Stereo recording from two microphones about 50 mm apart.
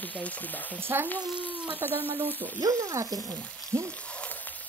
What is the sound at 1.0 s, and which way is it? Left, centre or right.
Sizzle, left.